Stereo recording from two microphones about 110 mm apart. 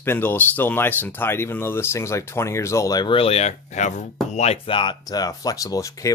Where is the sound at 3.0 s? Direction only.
55° left (ahead or behind); by 4.0 s 90° left.